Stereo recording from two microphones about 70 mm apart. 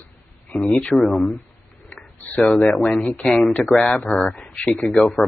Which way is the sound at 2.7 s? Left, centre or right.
Centre.